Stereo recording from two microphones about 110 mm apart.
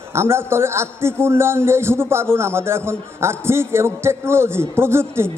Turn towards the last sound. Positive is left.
turn(degrees=-25)  # may be behind; listen again after turning